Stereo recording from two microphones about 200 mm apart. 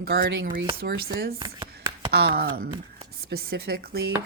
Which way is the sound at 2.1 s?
50° right (ahead or behind).